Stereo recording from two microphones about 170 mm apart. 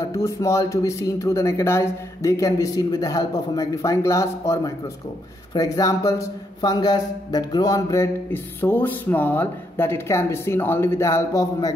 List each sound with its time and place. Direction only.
0.0 s a man's voice: 20° left (ahead or behind)